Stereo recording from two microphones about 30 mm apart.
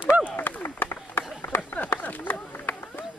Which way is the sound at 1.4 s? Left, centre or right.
Left.